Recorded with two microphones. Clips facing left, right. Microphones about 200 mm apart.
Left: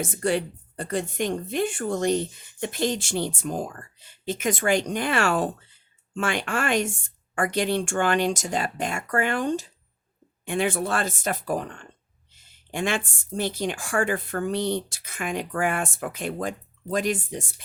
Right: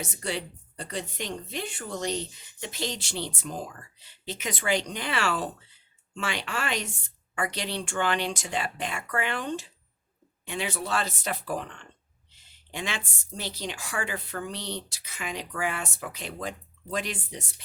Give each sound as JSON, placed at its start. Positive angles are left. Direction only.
{"t": 0.0, "sound": "a woman's voice", "side_deg": 50}